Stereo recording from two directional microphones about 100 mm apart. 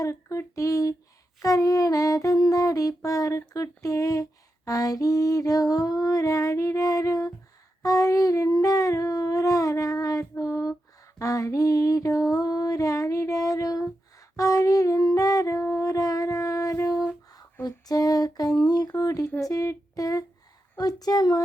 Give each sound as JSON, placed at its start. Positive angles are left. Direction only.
{"t": 0.0, "sound": "female singing", "side_deg": 30}
{"t": 11.2, "sound": "a sound", "side_deg": 30}
{"t": 18.6, "sound": "female singing", "side_deg": 40}